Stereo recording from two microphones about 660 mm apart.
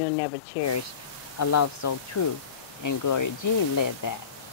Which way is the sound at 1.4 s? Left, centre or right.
Left.